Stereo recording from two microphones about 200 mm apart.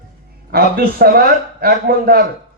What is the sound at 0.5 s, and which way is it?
A man's voice, 50° right (ahead or behind).